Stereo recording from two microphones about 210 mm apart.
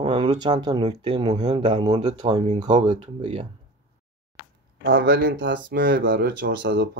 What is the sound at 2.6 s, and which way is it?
Speech, 20° right (ahead or behind).